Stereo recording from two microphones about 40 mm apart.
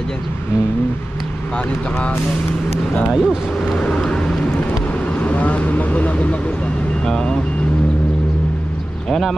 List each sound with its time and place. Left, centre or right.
3.1 s speech: centre
3.7 s vehicle: left
5.2 s speech: left